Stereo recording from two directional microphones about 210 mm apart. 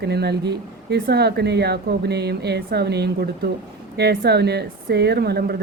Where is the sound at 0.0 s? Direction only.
50° right (ahead or behind).